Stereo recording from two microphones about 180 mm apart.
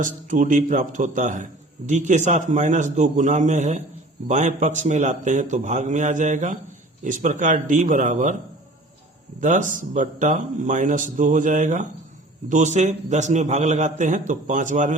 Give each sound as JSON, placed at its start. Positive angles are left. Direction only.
{"t": 0.0, "sound": "a man's voice", "side_deg": -45}
{"t": 9.4, "sound": "a man's voice", "side_deg": -45}